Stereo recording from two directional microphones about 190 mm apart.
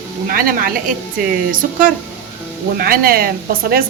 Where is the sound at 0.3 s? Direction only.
50° right (ahead or behind).